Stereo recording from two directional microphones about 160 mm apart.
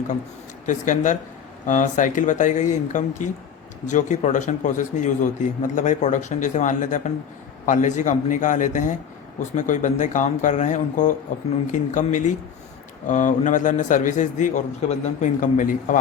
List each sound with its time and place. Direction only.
0.6 s a man's voice: 50° left (ahead or behind)